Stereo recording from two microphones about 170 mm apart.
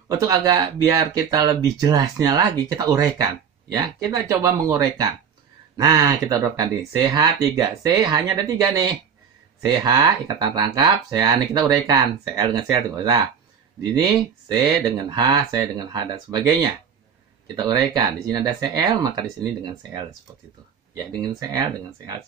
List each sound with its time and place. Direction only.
0.2 s speech: 20° right (ahead or behind)